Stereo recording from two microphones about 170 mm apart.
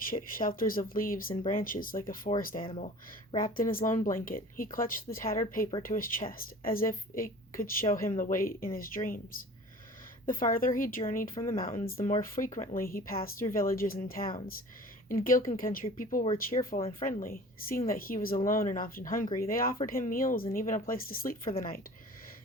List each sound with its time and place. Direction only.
0.1 s speech: 55° left (ahead or behind)
2.6 s speech: 35° left (ahead or behind)
3.3 s speech: 55° left (ahead or behind)